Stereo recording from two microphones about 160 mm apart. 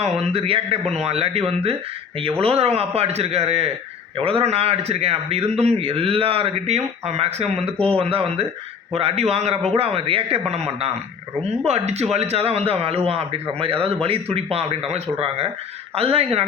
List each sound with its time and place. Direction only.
0.0 s a man's voice: 40° right (ahead or behind)